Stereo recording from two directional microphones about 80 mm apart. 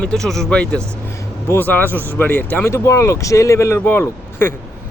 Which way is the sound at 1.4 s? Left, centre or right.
Left.